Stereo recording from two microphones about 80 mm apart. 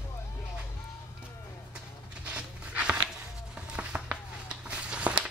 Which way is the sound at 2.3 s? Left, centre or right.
Centre.